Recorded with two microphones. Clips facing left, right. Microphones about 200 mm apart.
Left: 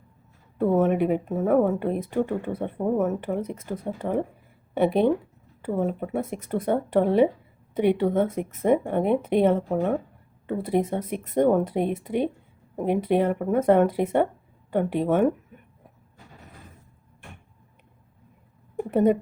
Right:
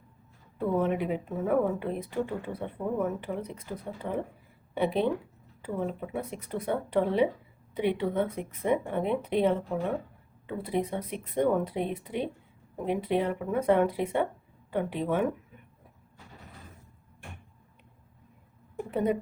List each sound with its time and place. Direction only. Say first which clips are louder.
0.6 s speech: left 7 dB; 50° left (ahead or behind)
18.9 s speech: left 8 dB; 50° left (ahead or behind)